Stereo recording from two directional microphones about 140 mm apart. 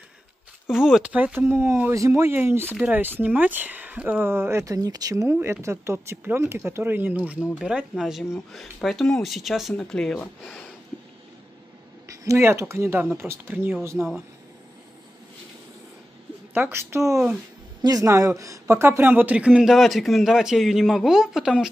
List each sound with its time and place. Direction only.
0.7 s speech: 5° right (ahead or behind)
12.1 s speech: 20° right (ahead or behind)
13.9 s a man's voice: centre (ahead or behind)
16.5 s a man's voice: 15° right (ahead or behind)